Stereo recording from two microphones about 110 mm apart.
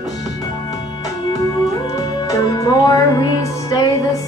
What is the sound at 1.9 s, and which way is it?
Music, 30° left (ahead or behind).